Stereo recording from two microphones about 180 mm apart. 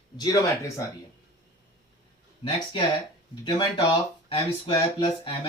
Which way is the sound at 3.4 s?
25° left (ahead or behind).